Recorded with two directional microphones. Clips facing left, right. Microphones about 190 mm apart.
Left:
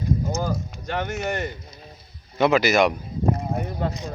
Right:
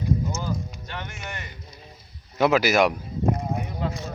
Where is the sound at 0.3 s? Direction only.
45° left (ahead or behind).